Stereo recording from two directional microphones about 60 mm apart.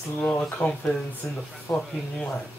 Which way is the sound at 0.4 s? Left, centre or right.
Centre.